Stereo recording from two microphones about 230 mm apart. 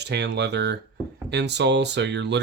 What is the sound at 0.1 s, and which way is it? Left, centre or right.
Speech, right.